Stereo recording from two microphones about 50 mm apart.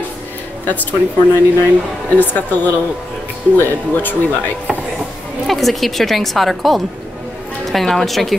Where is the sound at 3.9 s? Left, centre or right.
Left.